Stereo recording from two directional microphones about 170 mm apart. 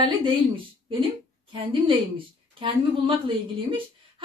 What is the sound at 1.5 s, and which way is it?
A woman's voice, 30° right (ahead or behind).